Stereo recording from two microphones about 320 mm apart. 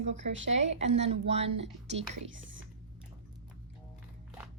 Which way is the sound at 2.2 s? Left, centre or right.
Right.